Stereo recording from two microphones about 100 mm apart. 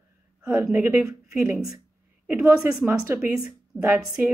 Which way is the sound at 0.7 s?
15° right (ahead or behind).